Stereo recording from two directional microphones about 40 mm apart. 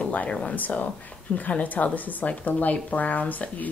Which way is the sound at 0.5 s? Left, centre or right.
Left.